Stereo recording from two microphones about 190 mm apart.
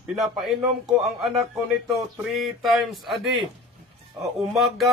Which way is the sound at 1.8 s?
Centre (ahead or behind).